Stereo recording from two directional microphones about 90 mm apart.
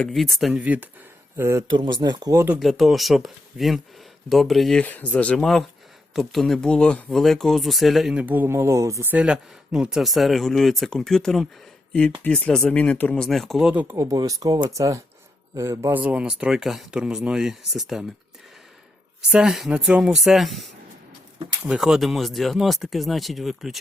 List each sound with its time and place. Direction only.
0.0 s speech: 5° left (ahead or behind)
0.6 s speech: 15° right (ahead or behind)
1.4 s speech: 30° right (ahead or behind)
1.7 s speech: 60° right (ahead or behind)
2.6 s speech: centre (ahead or behind)
4.8 s speech: 15° left (ahead or behind)
5.4 s speech: 5° left (ahead or behind)
8.1 s speech: 20° right (ahead or behind); by 9.0 s 35° right (ahead or behind)
9.0 s speech: 10° right (ahead or behind); by 13.2 s 15° left (ahead or behind)
13.2 s speech: 5° left (ahead or behind)
13.9 s speech: 35° right (ahead or behind)
15.9 s speech: 15° right (ahead or behind)
19.3 s speech: 5° right (ahead or behind)
21.8 s speech: 5° right (ahead or behind)